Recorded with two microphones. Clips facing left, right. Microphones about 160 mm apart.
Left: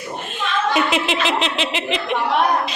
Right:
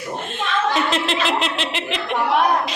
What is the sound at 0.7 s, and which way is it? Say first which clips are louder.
Speech: left 1 dB; 10° left (ahead or behind).